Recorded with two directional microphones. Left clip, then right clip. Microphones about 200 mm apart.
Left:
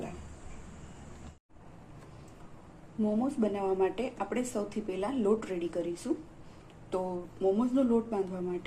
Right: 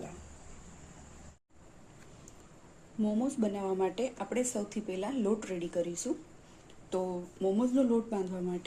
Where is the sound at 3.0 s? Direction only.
35° right (ahead or behind).